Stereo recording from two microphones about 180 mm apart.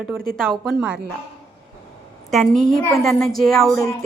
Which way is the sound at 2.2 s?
Centre (ahead or behind).